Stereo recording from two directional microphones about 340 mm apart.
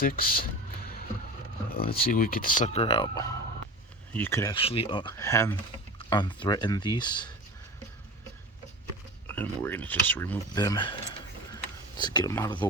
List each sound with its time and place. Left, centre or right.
0.0 s speech: left
1.7 s speech: left
9.2 s speech: centre
11.5 s a sound: centre